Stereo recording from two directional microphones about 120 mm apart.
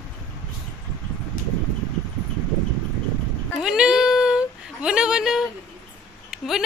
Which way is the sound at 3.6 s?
5° right (ahead or behind).